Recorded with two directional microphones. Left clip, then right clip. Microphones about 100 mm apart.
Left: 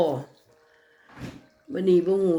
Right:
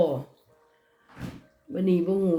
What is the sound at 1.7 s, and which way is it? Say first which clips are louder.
Speech: left 4 dB; 5° left (ahead or behind).